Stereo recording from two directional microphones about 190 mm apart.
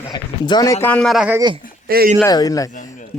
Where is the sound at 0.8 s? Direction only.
5° left (ahead or behind).